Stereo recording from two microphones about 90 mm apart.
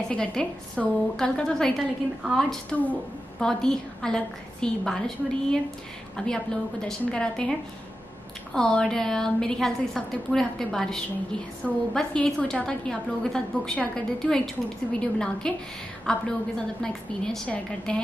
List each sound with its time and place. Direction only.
0.1 s a woman's voice: 10° left (ahead or behind)
8.5 s a woman's voice: 5° left (ahead or behind)